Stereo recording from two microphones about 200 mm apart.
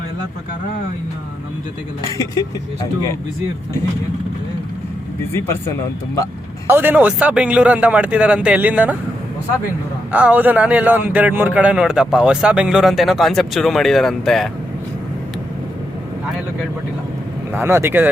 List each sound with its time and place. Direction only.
2.1 s speech: 15° left (ahead or behind)
6.7 s a man's voice: 10° right (ahead or behind)
10.1 s a man's voice: 5° right (ahead or behind)
17.5 s a man's voice: 10° right (ahead or behind)